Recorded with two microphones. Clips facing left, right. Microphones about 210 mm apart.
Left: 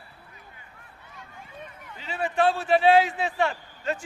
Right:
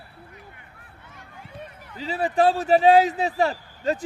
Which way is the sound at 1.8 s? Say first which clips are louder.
Right 4 dB; 35° right (ahead or behind).